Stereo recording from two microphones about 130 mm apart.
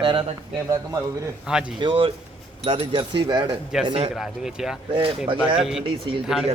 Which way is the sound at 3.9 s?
50° right (ahead or behind).